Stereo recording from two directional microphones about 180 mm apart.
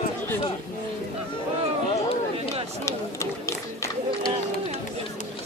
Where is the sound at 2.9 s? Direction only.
15° left (ahead or behind).